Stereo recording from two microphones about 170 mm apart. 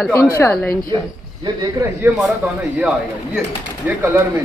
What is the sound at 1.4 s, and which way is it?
A man's voice, 20° right (ahead or behind).